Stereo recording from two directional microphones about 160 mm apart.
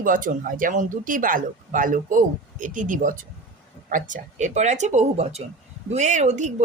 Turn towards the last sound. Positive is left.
turn(degrees=-45)  # may be behind; listen again after turning